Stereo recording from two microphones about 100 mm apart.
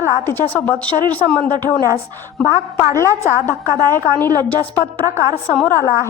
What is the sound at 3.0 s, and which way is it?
A woman's voice, 25° left (ahead or behind).